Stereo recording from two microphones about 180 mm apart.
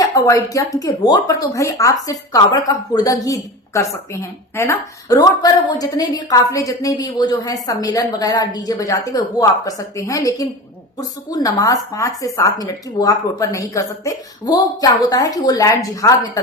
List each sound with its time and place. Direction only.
0.1 s speech: 15° left (ahead or behind)